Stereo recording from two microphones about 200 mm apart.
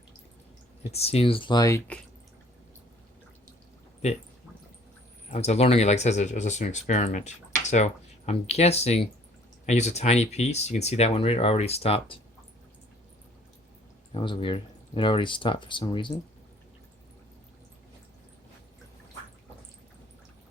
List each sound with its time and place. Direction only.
0.9 s speech: 30° left (ahead or behind); by 2.0 s 15° left (ahead or behind)
4.0 s speech: 35° left (ahead or behind)
5.3 s speech: 30° left (ahead or behind)
14.1 s speech: 25° left (ahead or behind)